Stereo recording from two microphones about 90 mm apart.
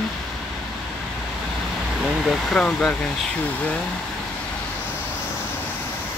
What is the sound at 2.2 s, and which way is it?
Speech, 5° left (ahead or behind).